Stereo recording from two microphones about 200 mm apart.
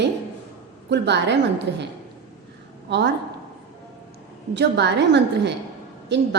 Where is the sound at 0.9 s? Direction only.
60° right (ahead or behind).